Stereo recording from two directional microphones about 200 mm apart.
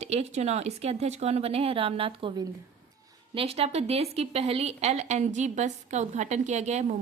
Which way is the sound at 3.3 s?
30° right (ahead or behind).